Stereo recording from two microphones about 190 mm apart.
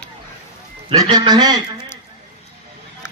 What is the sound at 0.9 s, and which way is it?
Speech, 20° right (ahead or behind).